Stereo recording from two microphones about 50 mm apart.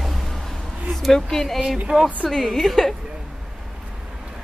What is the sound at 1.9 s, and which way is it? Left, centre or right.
Speech, right.